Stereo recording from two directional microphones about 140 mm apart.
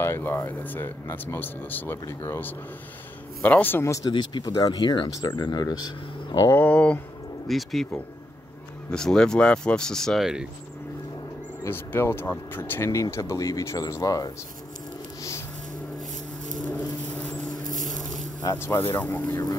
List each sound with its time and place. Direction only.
0.0 s speech: 15° left (ahead or behind)
4.1 s speech: 35° left (ahead or behind)
6.6 s speech: 10° left (ahead or behind)
8.9 s speech: 5° left (ahead or behind)
11.6 s speech: 15° left (ahead or behind)
16.7 s rodents: 10° left (ahead or behind)
17.6 s a sound: 65° right (ahead or behind)
18.4 s speech: 25° left (ahead or behind)